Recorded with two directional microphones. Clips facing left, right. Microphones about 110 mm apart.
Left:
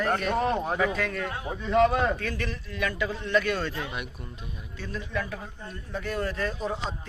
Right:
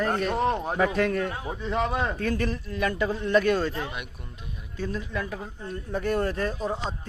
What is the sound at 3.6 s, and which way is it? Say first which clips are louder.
Speech: right 3 dB; 25° right (ahead or behind).